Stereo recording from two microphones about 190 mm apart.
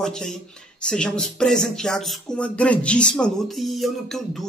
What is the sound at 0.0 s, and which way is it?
Speech, 5° left (ahead or behind).